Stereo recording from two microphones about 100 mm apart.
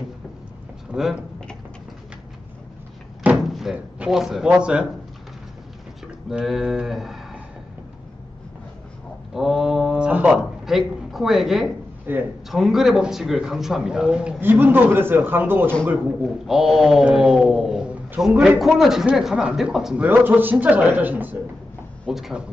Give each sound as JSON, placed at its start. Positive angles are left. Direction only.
{"t": 0.9, "sound": "a man's voice", "side_deg": -10}
{"t": 3.3, "sound": "door", "side_deg": 0}
{"t": 4.0, "sound": "a man's voice", "side_deg": -5}
{"t": 6.3, "sound": "a man's voice", "side_deg": -5}
{"t": 9.3, "sound": "a man's voice", "side_deg": -5}
{"t": 12.1, "sound": "a man's voice", "side_deg": -20}
{"t": 12.4, "sound": "a man's voice", "side_deg": -5}
{"t": 14.4, "sound": "a man's voice", "side_deg": -20}
{"t": 16.4, "sound": "a man's voice", "side_deg": -5}
{"t": 20.1, "sound": "a man's voice", "side_deg": -20}
{"t": 22.1, "sound": "a man's voice", "side_deg": -5}